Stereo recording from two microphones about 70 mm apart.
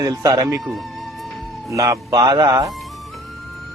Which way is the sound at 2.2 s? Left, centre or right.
Right.